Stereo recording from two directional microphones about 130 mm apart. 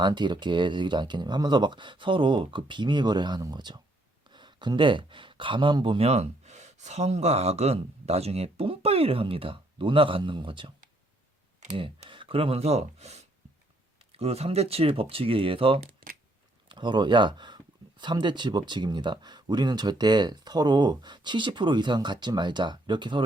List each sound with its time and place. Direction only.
0.0 s speech: 35° right (ahead or behind)
11.7 s speech: 40° right (ahead or behind)